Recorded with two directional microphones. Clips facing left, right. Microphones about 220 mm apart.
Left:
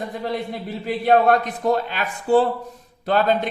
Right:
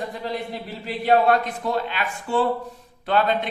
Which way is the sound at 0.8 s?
45° left (ahead or behind).